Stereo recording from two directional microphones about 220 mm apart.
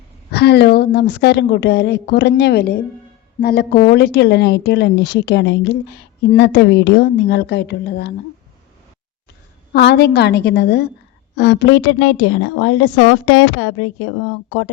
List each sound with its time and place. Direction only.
0.3 s a woman's voice: 50° left (ahead or behind)
9.7 s a woman's voice: 50° left (ahead or behind); by 14.1 s 65° left (ahead or behind)